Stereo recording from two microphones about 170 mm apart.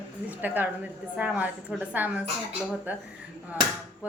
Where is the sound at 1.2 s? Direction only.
10° right (ahead or behind).